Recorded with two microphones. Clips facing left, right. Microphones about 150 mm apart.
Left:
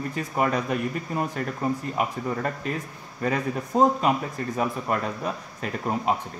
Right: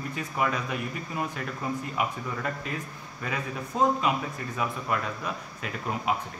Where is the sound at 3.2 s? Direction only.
45° left (ahead or behind).